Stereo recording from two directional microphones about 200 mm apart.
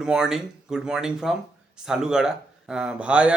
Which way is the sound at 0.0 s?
5° right (ahead or behind).